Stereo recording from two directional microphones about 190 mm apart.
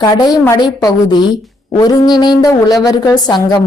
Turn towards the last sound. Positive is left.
turn(degrees=20)  # may be behind; listen again after turning